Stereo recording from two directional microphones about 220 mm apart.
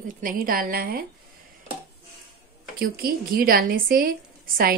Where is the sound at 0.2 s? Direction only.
40° right (ahead or behind).